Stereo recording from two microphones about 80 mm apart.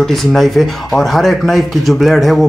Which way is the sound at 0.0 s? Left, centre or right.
Centre.